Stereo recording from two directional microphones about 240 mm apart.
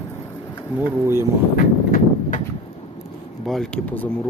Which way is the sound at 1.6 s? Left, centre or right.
Left.